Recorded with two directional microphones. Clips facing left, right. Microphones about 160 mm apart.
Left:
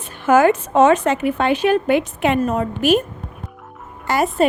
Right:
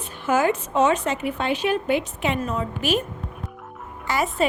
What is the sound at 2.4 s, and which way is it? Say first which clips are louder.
Speech: left 7 dB; 55° left (ahead or behind).